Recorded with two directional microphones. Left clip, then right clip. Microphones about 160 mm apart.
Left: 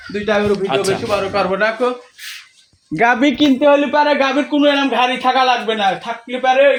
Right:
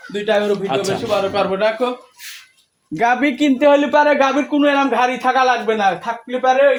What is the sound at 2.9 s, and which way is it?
Speech, 60° left (ahead or behind).